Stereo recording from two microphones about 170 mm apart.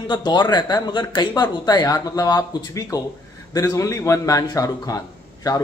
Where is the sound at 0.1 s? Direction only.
25° left (ahead or behind).